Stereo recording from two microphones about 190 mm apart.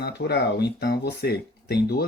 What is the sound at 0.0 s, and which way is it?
Speech, 60° left (ahead or behind).